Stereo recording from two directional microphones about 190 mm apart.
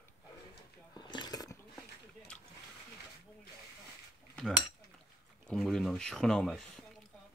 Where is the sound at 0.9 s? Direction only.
25° left (ahead or behind).